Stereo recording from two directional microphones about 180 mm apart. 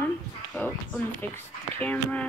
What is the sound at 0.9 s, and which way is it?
Speech, 10° left (ahead or behind).